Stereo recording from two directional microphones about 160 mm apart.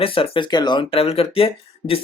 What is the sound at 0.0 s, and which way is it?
Speech, 35° left (ahead or behind).